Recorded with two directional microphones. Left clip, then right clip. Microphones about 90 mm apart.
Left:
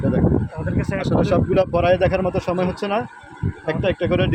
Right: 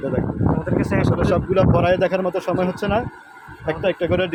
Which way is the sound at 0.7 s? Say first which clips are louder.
Right 1 dB; 40° right (ahead or behind).